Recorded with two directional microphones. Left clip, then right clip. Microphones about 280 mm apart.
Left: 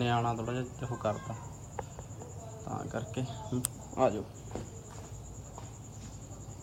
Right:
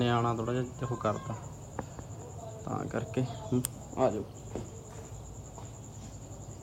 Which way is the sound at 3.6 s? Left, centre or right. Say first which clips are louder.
Left 2 dB; centre.